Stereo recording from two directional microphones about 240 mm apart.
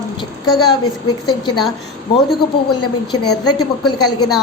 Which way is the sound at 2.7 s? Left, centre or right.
Left.